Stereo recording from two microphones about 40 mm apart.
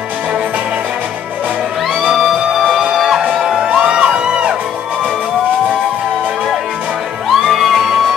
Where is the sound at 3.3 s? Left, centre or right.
Right.